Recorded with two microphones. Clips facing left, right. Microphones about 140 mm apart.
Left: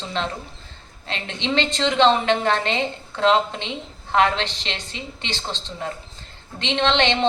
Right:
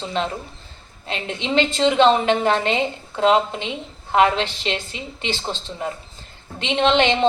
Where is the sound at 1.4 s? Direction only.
10° right (ahead or behind).